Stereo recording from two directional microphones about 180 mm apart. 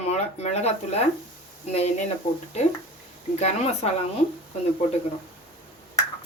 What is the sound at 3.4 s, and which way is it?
Speech, 35° left (ahead or behind).